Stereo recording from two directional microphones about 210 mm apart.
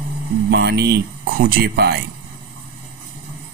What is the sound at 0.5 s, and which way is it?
Speech, 55° right (ahead or behind).